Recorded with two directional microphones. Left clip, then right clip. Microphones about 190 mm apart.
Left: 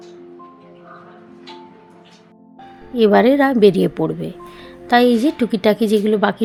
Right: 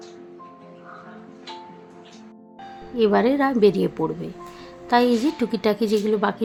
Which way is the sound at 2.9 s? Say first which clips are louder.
Left 6 dB; 25° left (ahead or behind).